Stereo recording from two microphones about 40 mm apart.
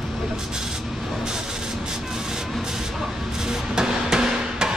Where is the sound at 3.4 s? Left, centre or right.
Centre.